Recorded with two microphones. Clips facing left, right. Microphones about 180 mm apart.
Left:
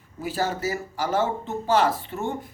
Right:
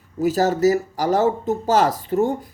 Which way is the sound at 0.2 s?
40° right (ahead or behind).